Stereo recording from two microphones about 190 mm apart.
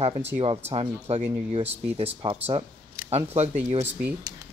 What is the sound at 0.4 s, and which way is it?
Speech, 30° right (ahead or behind).